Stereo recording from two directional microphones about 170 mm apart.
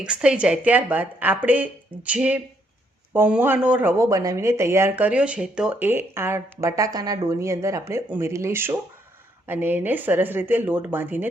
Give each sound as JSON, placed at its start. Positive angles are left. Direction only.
{"t": 0.0, "sound": "speech", "side_deg": -5}